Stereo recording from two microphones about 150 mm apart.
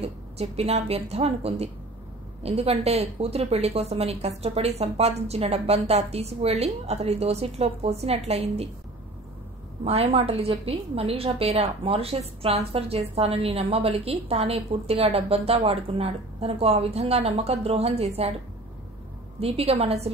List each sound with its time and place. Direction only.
0.0 s a woman's voice: 45° right (ahead or behind)
9.8 s a woman's voice: 40° right (ahead or behind)
19.4 s speech: 40° right (ahead or behind)